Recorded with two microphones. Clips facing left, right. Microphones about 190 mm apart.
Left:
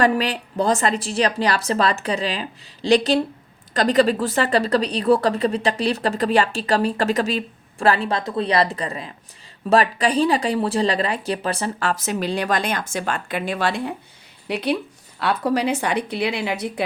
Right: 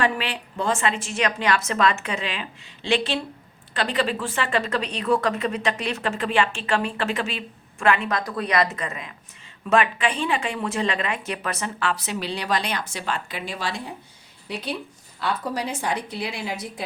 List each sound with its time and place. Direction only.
0.0 s a woman's voice: 40° left (ahead or behind); by 16.8 s 70° left (ahead or behind)